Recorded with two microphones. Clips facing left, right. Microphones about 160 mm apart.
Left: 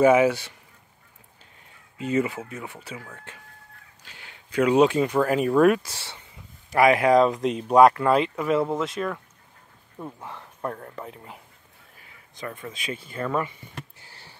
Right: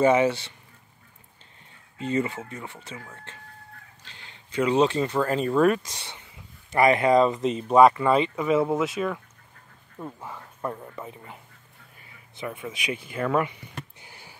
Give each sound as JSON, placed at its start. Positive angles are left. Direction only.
{"t": 0.0, "sound": "speech", "side_deg": 5}
{"t": 2.0, "sound": "speech", "side_deg": 5}
{"t": 5.9, "sound": "speech", "side_deg": -15}
{"t": 6.7, "sound": "speech", "side_deg": 5}
{"t": 12.4, "sound": "speech", "side_deg": -5}
{"t": 14.0, "sound": "a sound", "side_deg": -15}